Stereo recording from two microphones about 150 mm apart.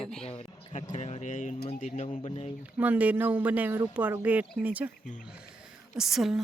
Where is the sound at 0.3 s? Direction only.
45° left (ahead or behind).